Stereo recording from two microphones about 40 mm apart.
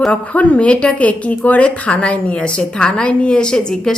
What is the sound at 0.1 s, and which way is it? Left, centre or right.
A woman's voice, left.